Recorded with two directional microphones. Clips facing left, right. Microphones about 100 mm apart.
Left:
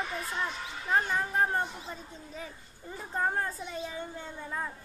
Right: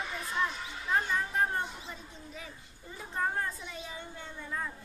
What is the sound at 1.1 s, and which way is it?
Children playing, 35° left (ahead or behind).